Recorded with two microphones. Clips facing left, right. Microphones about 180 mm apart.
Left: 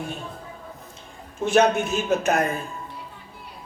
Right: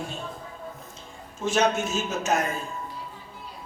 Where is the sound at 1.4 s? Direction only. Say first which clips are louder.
Left 5 dB; 60° left (ahead or behind).